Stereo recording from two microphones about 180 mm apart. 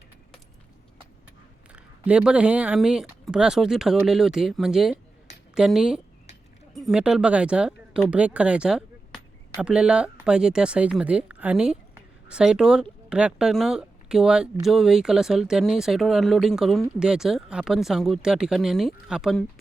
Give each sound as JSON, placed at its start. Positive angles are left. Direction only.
{"t": 1.7, "sound": "speech", "side_deg": -5}